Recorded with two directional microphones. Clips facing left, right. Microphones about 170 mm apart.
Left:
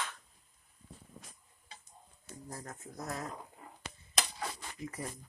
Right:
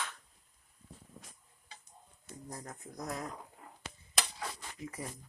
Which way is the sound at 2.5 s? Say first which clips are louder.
Even; 15° right (ahead or behind).